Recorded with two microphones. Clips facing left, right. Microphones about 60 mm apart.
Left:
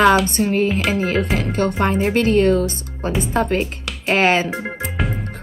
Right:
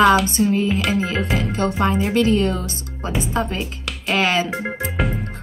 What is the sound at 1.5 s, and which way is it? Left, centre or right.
A woman's voice, left.